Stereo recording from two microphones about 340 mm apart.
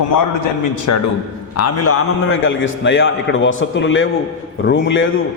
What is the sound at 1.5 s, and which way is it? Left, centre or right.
A man's voice, left.